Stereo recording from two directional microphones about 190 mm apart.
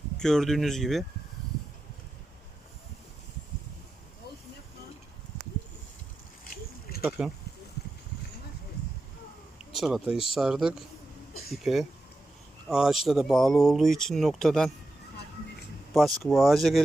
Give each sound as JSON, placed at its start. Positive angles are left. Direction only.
{"t": 0.2, "sound": "speech", "side_deg": 0}
{"t": 7.2, "sound": "speech", "side_deg": -5}
{"t": 9.6, "sound": "speech", "side_deg": 0}
{"t": 15.9, "sound": "speech", "side_deg": 0}